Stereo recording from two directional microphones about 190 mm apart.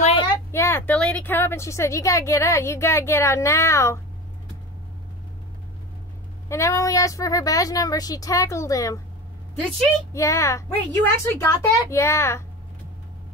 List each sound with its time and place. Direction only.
0.0 s a sound: 30° left (ahead or behind)
0.5 s speech: 15° left (ahead or behind)
6.5 s speech: 15° left (ahead or behind)
10.1 s speech: 15° left (ahead or behind)